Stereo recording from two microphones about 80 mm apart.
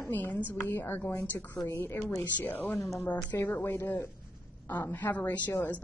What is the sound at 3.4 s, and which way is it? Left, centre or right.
A woman's voice, left.